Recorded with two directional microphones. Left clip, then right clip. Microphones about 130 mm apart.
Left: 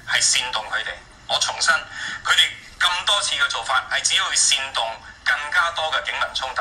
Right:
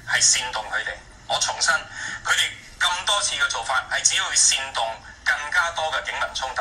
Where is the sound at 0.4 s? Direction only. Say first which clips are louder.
Left 2 dB; 15° left (ahead or behind).